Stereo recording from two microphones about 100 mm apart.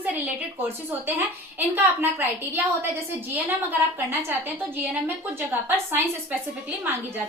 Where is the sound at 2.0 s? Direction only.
20° right (ahead or behind).